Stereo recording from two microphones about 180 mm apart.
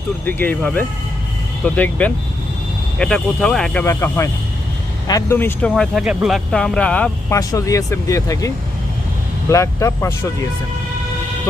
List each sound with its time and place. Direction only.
0.3 s speech: 10° left (ahead or behind)
3.8 s speech: 15° left (ahead or behind)
5.7 s speech: centre (ahead or behind)
7.3 s speech: 20° left (ahead or behind)